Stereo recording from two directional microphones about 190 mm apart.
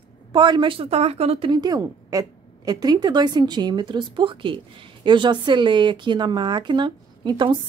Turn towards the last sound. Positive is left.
turn(degrees=-25)  # may be behind; listen again after turning